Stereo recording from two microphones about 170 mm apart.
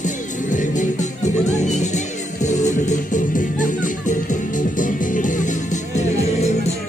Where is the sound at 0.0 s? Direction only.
50° left (ahead or behind).